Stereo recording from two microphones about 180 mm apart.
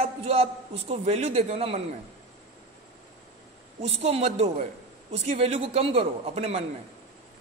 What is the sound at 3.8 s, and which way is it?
A man's voice, 35° right (ahead or behind).